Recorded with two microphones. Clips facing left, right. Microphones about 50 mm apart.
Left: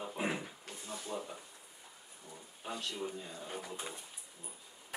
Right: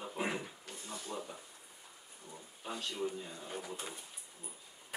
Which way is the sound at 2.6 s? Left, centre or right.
Centre.